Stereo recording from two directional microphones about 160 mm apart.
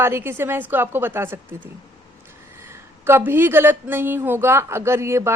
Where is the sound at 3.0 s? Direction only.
15° right (ahead or behind).